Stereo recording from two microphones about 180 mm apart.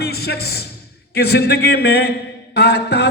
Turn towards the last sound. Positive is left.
turn(degrees=65)  # may be behind; listen again after turning